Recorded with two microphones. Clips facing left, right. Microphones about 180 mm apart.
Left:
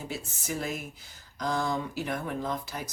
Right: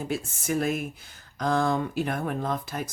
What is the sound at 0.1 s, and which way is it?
A woman's voice, 55° right (ahead or behind).